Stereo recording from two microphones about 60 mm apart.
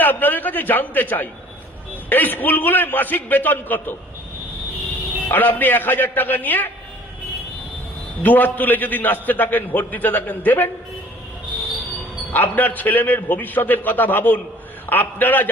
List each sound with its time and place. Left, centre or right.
0.0 s a man's voice: left
5.3 s a man's voice: left
8.2 s a man's voice: left
12.3 s a man's voice: left